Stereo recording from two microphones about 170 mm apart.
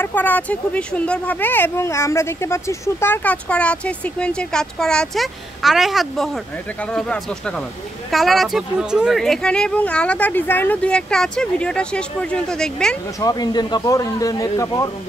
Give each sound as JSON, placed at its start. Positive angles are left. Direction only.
{"t": 0.0, "sound": "speech", "side_deg": 10}
{"t": 13.2, "sound": "speech", "side_deg": 25}